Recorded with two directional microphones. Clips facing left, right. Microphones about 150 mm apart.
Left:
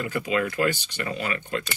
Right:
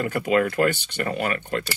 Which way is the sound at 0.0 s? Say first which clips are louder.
Right 4 dB; 50° right (ahead or behind).